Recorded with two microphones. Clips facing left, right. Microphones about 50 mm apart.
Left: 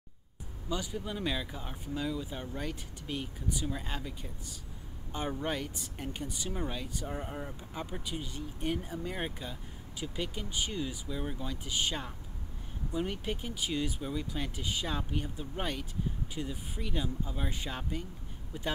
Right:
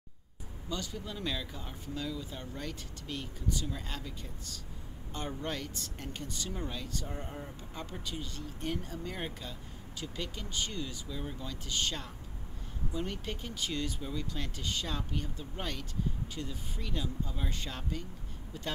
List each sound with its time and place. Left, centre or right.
0.7 s speech: centre